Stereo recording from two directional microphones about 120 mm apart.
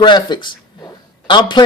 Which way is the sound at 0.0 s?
40° left (ahead or behind).